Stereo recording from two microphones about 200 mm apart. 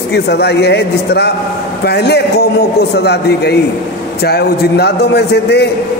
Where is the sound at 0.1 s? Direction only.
55° left (ahead or behind).